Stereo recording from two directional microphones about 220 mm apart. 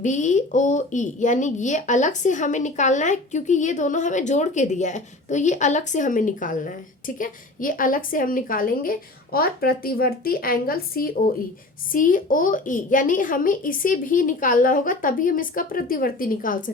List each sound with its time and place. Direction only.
0.0 s speech: 35° left (ahead or behind)